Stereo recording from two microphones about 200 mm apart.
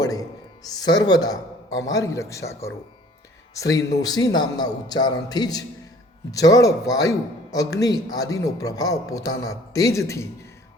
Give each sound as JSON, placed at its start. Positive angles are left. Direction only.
{"t": 0.0, "sound": "a man's voice", "side_deg": 20}